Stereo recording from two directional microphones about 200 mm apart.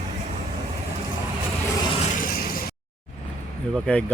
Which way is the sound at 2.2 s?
45° left (ahead or behind).